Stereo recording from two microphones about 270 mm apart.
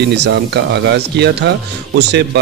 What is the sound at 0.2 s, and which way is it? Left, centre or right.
Speech, right.